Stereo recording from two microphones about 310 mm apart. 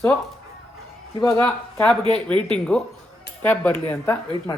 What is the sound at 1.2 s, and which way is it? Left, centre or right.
Speech, centre.